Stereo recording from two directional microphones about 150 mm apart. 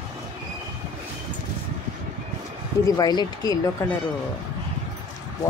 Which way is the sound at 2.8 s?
25° left (ahead or behind).